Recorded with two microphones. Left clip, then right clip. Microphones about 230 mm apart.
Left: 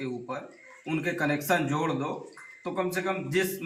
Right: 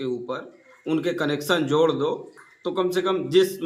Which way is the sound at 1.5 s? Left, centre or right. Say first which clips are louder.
Right 10 dB; right.